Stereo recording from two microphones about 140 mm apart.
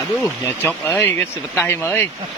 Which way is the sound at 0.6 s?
15° left (ahead or behind).